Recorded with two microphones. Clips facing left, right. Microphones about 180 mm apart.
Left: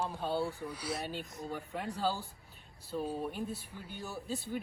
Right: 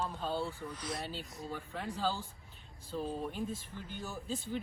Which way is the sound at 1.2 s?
15° left (ahead or behind).